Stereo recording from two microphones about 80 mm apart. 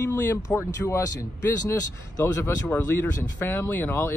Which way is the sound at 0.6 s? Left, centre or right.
Left.